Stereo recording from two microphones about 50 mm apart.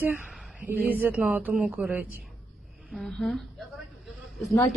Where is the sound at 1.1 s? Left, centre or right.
Right.